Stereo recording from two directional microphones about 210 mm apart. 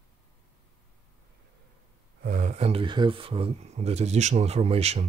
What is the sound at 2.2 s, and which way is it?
Speech, 40° right (ahead or behind).